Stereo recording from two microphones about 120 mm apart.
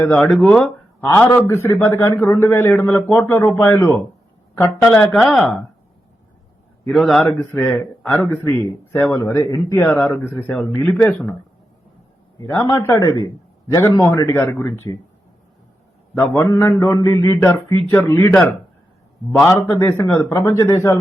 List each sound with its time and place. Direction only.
0.2 s speech: 10° left (ahead or behind)
1.0 s a man's voice: 20° left (ahead or behind)
5.2 s speech: centre (ahead or behind)
6.8 s speech: centre (ahead or behind)
7.3 s a man's voice: 15° left (ahead or behind)
9.8 s speech: 15° left (ahead or behind)
12.5 s a man's voice: 25° left (ahead or behind)
16.1 s a man's voice: 20° left (ahead or behind)
18.2 s speech: 15° left (ahead or behind)
19.5 s a man's voice: 20° left (ahead or behind)